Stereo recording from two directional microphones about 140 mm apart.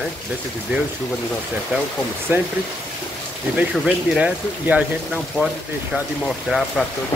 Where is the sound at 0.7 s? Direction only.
15° right (ahead or behind).